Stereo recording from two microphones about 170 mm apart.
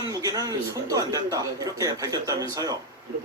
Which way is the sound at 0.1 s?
20° right (ahead or behind).